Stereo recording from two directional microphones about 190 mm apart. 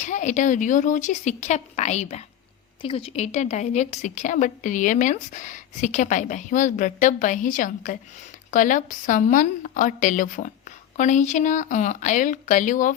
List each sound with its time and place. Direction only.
0.0 s a woman's voice: 40° left (ahead or behind)